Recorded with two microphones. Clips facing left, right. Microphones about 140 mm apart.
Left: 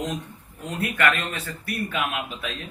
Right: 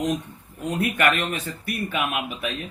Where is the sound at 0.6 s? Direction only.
20° right (ahead or behind).